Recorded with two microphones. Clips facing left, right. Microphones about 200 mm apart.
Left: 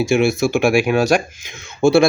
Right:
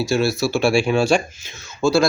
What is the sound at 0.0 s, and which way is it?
Speech, 50° left (ahead or behind).